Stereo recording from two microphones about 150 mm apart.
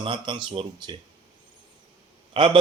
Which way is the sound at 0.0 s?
30° right (ahead or behind).